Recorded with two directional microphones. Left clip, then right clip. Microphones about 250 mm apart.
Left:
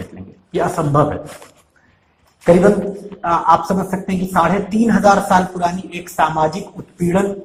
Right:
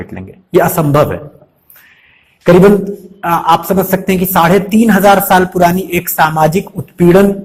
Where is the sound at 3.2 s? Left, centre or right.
Right.